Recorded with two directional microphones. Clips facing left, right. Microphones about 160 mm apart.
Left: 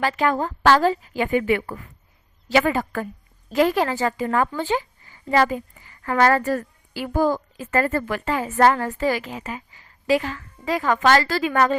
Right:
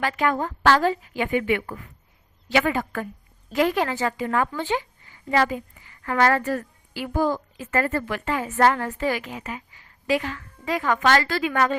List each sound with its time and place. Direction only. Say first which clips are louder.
0.0 s a woman's voice: left 2 dB; 30° left (ahead or behind)